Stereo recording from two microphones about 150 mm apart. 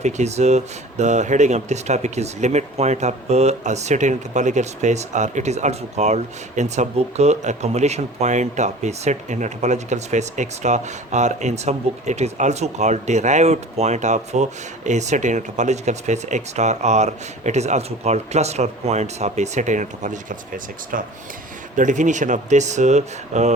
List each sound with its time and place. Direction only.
0.0 s speech: 50° right (ahead or behind)